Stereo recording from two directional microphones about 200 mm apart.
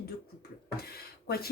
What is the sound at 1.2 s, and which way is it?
Speech, 50° left (ahead or behind).